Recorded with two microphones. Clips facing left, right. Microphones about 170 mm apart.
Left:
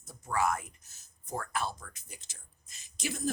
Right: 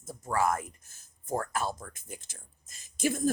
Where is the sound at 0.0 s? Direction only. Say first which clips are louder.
Right 2 dB; 45° right (ahead or behind).